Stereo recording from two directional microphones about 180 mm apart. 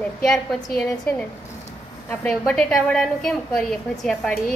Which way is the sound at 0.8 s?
5° left (ahead or behind).